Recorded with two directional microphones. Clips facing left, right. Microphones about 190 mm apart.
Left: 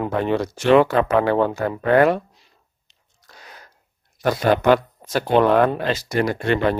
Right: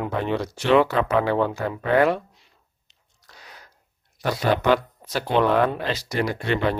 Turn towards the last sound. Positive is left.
turn(degrees=50)  # may be behind; listen again after turning